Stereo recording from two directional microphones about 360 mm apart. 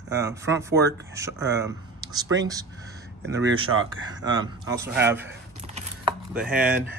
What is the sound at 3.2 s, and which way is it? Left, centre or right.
Speech, right.